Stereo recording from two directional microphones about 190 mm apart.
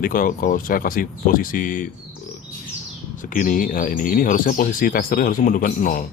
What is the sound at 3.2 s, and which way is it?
A man's voice, 45° left (ahead or behind).